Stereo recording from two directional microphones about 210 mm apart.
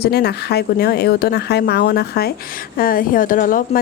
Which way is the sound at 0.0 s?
50° left (ahead or behind).